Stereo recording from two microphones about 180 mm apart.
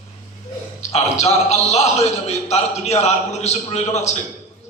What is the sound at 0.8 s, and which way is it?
A man's voice, 35° left (ahead or behind).